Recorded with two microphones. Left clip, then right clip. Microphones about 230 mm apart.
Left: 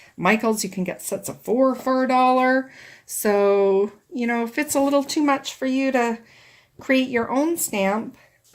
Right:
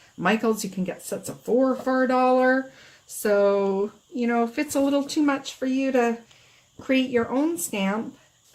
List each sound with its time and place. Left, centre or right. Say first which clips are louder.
0.2 s speech: left 3 dB; left